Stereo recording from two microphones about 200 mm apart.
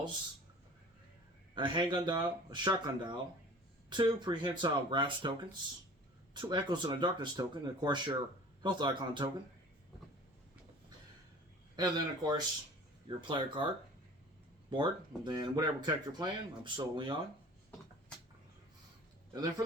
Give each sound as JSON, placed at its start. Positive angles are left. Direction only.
{"t": 1.5, "sound": "speech", "side_deg": -25}
{"t": 11.8, "sound": "speech", "side_deg": -20}
{"t": 14.7, "sound": "speech", "side_deg": -20}
{"t": 19.3, "sound": "speech", "side_deg": -20}